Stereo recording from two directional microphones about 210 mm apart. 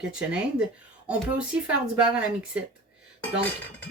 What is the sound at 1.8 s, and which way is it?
Speech, 5° right (ahead or behind).